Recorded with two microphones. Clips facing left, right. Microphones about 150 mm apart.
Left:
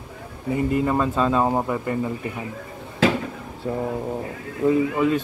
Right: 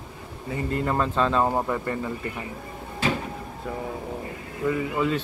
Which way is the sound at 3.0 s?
90° left.